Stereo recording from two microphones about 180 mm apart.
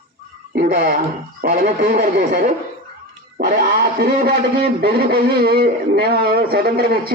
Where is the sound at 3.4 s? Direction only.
60° right (ahead or behind).